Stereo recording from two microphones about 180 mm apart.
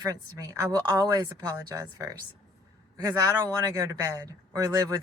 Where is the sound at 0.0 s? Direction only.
20° right (ahead or behind).